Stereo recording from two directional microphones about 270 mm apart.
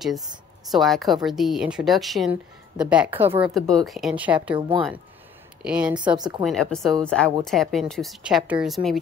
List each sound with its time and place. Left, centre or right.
0.7 s a woman's voice: centre
4.6 s speech: centre
5.6 s a woman's voice: centre
6.1 s speech: centre
6.4 s a woman's voice: centre